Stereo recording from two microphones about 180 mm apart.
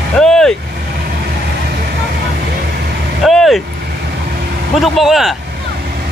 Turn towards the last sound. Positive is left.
turn(degrees=0)  # may be behind; listen again after turning